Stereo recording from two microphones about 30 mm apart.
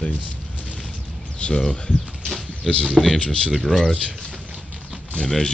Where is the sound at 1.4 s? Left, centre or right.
Left.